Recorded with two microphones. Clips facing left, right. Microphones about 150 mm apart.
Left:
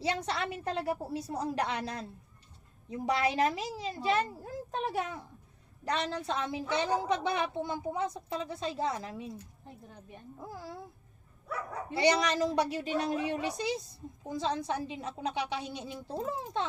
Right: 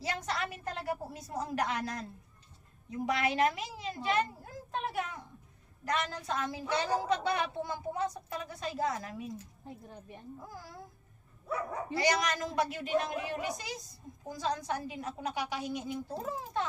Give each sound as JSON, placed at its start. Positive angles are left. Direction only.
{"t": 0.0, "sound": "a woman's voice", "side_deg": 30}
{"t": 10.5, "sound": "a woman's voice", "side_deg": 25}
{"t": 11.9, "sound": "a woman's voice", "side_deg": 30}